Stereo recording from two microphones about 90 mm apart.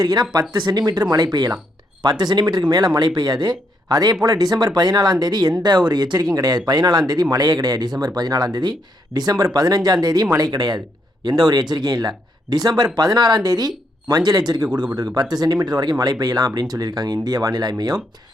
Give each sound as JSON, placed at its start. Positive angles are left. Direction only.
{"t": 0.0, "sound": "speech", "side_deg": -50}